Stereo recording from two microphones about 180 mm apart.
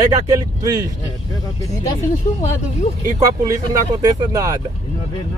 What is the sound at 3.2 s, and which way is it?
Speech, 20° right (ahead or behind).